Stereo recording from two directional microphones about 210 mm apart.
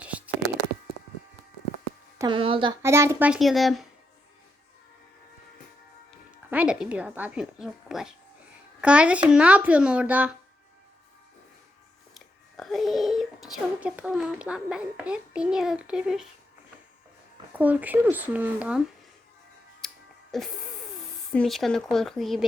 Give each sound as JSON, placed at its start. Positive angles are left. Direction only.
{"t": 0.0, "sound": "a sound", "side_deg": -5}
{"t": 2.1, "sound": "speech", "side_deg": -20}
{"t": 2.8, "sound": "speech", "side_deg": -15}
{"t": 6.1, "sound": "speech", "side_deg": -5}
{"t": 12.1, "sound": "a child's voice", "side_deg": 0}
{"t": 17.5, "sound": "speech", "side_deg": -5}
{"t": 19.8, "sound": "music", "side_deg": 0}
{"t": 20.3, "sound": "speech", "side_deg": 0}